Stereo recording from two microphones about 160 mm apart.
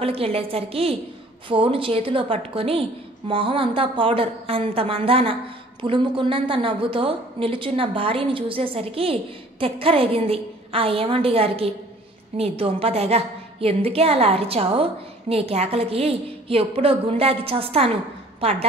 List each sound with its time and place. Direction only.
0.0 s a woman's voice: 35° right (ahead or behind)